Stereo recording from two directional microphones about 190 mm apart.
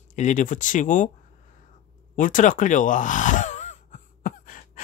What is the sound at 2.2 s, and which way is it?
Gasp, 45° left (ahead or behind).